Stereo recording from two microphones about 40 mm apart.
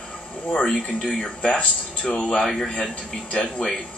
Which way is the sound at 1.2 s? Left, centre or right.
Left.